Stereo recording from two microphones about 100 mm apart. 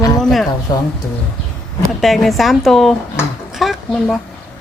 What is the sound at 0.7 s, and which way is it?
Speech, 40° left (ahead or behind).